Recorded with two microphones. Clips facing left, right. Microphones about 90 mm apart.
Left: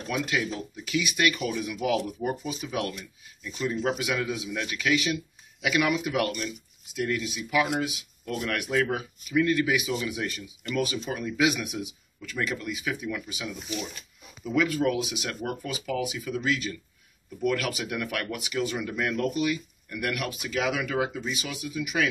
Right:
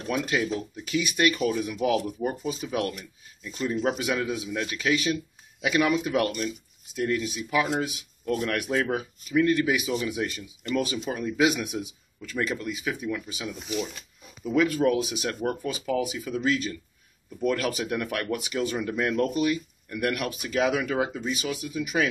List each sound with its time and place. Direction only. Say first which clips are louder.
0.1 s a man's voice: right 2 dB; 35° right (ahead or behind)
14.5 s a man's voice: right 3 dB; 40° right (ahead or behind)